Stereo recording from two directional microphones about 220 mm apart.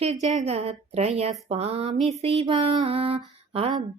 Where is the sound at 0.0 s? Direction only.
30° right (ahead or behind).